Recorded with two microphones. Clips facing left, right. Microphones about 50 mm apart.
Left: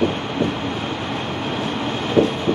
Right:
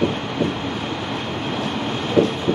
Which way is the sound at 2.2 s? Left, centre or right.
Left.